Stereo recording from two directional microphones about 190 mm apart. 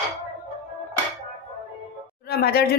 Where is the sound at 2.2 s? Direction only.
55° left (ahead or behind).